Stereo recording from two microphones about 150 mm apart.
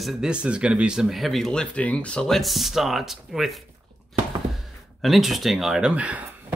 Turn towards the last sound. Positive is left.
turn(degrees=-10)  # may be behind; listen again after turning